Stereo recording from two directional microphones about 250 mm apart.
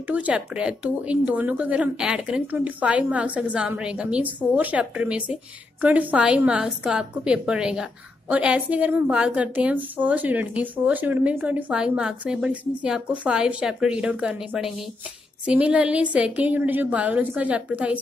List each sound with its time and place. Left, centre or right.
0.0 s speech: centre